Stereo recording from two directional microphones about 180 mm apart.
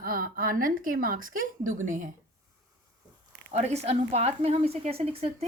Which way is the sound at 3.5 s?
35° right (ahead or behind).